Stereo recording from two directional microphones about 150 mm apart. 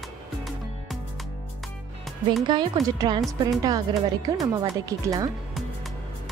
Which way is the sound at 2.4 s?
30° right (ahead or behind).